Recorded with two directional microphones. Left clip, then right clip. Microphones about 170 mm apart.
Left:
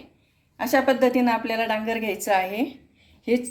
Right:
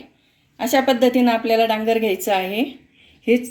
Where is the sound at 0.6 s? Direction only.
5° left (ahead or behind).